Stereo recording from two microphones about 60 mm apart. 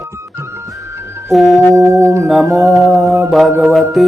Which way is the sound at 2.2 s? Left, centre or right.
Centre.